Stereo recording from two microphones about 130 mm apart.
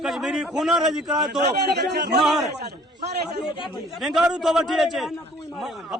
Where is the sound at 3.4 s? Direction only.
40° left (ahead or behind).